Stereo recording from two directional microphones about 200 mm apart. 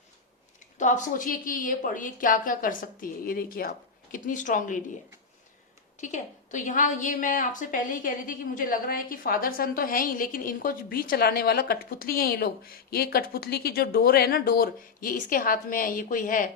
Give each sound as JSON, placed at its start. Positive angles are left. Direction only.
{"t": 0.8, "sound": "a woman's voice", "side_deg": 40}
{"t": 6.0, "sound": "a woman's voice", "side_deg": 40}